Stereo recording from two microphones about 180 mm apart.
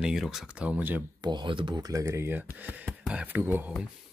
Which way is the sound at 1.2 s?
25° right (ahead or behind).